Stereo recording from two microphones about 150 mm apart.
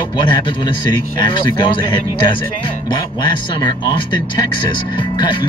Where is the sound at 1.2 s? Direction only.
35° left (ahead or behind).